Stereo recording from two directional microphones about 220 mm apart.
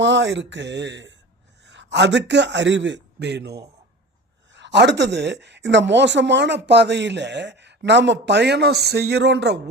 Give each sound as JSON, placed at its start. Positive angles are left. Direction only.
{"t": 0.0, "sound": "a man's voice", "side_deg": -55}